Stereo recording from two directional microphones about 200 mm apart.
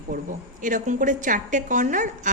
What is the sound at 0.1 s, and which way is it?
A woman's voice, 40° right (ahead or behind).